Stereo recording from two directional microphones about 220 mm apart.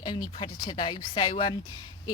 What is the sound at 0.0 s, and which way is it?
Speech, 20° left (ahead or behind).